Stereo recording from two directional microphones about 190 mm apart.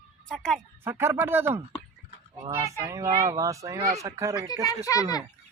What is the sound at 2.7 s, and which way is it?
Speech, 15° right (ahead or behind).